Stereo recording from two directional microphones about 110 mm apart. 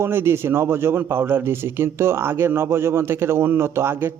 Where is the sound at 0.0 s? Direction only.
20° right (ahead or behind).